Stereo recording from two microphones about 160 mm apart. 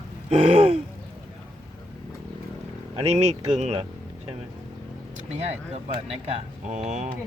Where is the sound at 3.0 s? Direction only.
45° right (ahead or behind).